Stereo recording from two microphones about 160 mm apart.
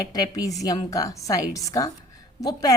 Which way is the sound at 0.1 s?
25° left (ahead or behind).